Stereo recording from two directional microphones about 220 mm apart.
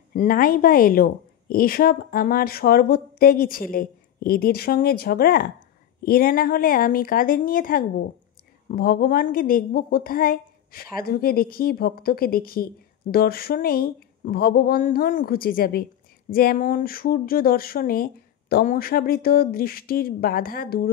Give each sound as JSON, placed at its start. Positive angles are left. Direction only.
{"t": 0.1, "sound": "speech", "side_deg": 40}